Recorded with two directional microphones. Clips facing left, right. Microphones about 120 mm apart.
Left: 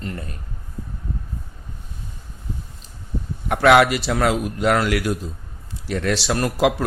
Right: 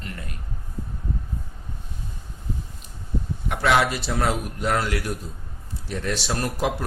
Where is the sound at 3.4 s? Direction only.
55° left (ahead or behind).